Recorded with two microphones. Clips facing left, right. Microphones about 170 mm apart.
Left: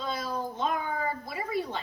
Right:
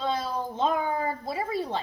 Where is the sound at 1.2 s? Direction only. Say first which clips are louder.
Right 3 dB; 30° right (ahead or behind).